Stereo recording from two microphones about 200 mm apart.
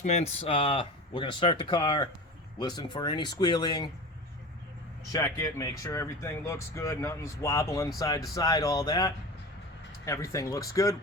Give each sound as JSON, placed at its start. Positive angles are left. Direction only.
{"t": 0.0, "sound": "speech", "side_deg": 35}
{"t": 5.1, "sound": "speech", "side_deg": 15}